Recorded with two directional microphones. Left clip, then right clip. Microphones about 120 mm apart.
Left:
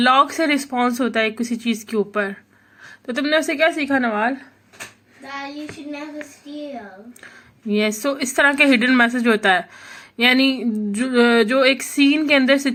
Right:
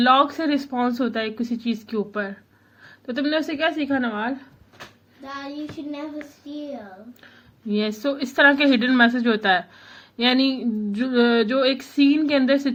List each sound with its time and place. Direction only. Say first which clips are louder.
0.0 s a woman's voice: left 2 dB; 35° left (ahead or behind); by 4.4 s 55° left (ahead or behind)
7.7 s a woman's voice: left 4 dB; 30° left (ahead or behind)